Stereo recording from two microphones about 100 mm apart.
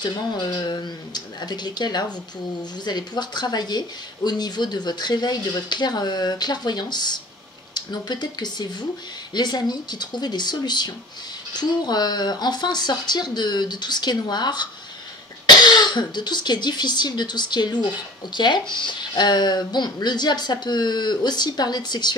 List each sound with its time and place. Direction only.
0.0 s speech: 45° left (ahead or behind)